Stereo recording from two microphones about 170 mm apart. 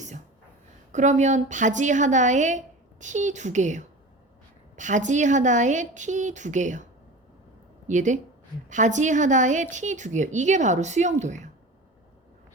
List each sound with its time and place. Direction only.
0.9 s a woman's voice: 45° right (ahead or behind)
7.9 s a woman's voice: 45° right (ahead or behind)